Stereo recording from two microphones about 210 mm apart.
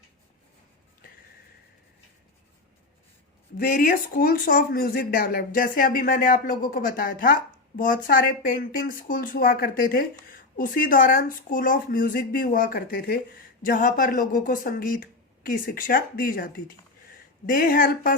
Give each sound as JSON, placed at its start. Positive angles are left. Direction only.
{"t": 3.6, "sound": "speech", "side_deg": 40}